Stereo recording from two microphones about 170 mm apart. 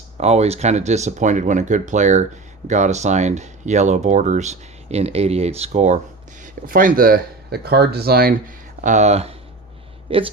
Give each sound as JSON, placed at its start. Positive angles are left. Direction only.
{"t": 0.2, "sound": "speech", "side_deg": -40}
{"t": 6.4, "sound": "speech", "side_deg": -55}
{"t": 8.8, "sound": "speech", "side_deg": -45}